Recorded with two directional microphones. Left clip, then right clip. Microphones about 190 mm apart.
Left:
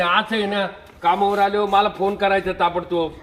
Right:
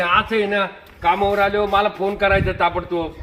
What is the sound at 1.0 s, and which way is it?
A man's voice, 15° left (ahead or behind).